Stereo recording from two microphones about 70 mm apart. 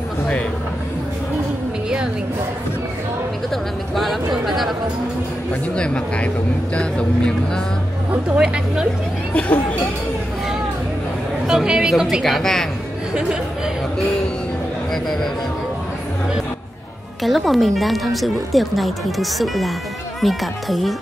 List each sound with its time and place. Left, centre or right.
3.4 s speech: centre
5.5 s speech: centre
9.3 s speech: centre
11.4 s speech: centre
17.2 s speech: centre